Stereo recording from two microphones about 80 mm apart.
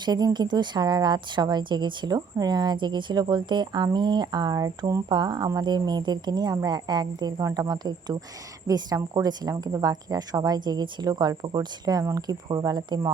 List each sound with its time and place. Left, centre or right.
0.0 s a woman's voice: right
5.0 s a woman's voice: right